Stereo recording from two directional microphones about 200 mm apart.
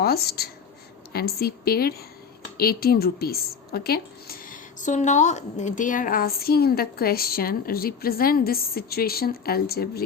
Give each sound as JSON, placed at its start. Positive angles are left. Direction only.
{"t": 0.0, "sound": "a woman's voice", "side_deg": 50}